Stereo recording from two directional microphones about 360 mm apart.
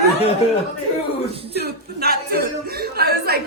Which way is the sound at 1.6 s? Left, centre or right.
Right.